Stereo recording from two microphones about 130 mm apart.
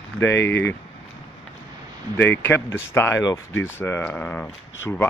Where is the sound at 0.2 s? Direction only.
20° left (ahead or behind).